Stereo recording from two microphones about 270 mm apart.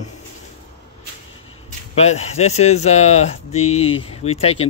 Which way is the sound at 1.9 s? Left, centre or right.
Left.